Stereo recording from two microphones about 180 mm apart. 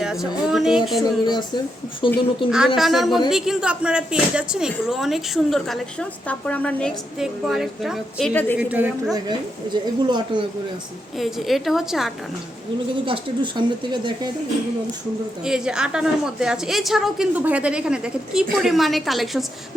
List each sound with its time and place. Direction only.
0.0 s speech: centre (ahead or behind)
1.2 s speech: 25° left (ahead or behind)
2.7 s speech: centre (ahead or behind)
8.3 s a woman's voice: 10° left (ahead or behind)
8.5 s a woman's voice: 5° right (ahead or behind)
9.8 s speech: 25° right (ahead or behind)
11.2 s speech: centre (ahead or behind)
13.1 s speech: 25° right (ahead or behind)
15.4 s speech: 5° right (ahead or behind)